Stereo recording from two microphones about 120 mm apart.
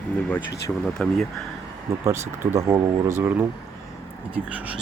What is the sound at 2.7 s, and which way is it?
Speech, 20° right (ahead or behind).